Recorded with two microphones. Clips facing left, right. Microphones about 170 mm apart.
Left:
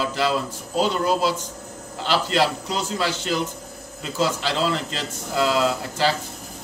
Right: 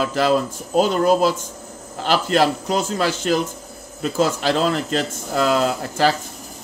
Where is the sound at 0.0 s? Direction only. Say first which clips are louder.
Right 5 dB; 50° right (ahead or behind).